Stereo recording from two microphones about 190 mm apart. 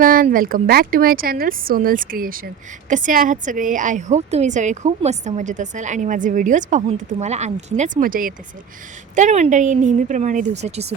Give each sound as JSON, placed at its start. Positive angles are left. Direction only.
{"t": 0.0, "sound": "a woman's voice", "side_deg": -50}